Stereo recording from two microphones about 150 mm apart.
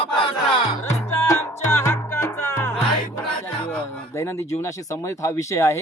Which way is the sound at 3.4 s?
15° left (ahead or behind).